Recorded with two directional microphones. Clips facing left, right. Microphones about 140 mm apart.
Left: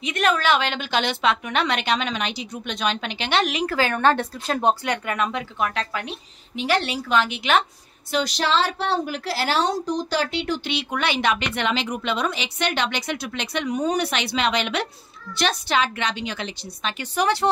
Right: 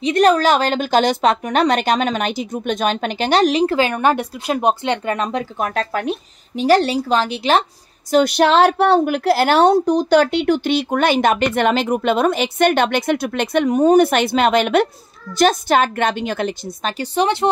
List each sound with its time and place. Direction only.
0.0 s speech: 35° right (ahead or behind)
3.7 s speech: 15° right (ahead or behind); by 7.6 s 35° right (ahead or behind)
8.1 s a woman's voice: 55° right (ahead or behind)
17.0 s speech: 25° right (ahead or behind)